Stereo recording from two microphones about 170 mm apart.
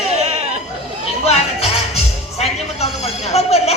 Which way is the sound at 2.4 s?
40° left (ahead or behind).